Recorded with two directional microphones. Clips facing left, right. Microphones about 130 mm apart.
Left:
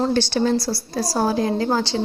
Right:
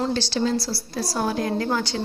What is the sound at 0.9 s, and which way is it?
Speech, 40° left (ahead or behind).